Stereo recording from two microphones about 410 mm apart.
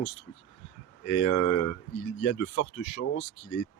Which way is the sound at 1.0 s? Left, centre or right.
Left.